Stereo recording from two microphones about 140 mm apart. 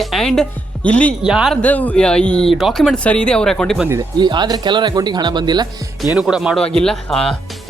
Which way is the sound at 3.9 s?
30° right (ahead or behind).